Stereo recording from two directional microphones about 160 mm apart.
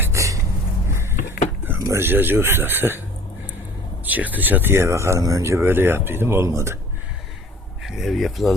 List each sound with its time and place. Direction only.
0.0 s a sound: 20° right (ahead or behind)
1.6 s speech: 15° right (ahead or behind)
4.0 s speech: 10° right (ahead or behind)
7.9 s speech: centre (ahead or behind)